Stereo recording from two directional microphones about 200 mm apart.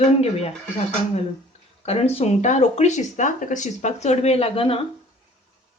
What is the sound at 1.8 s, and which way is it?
Speech, 30° left (ahead or behind).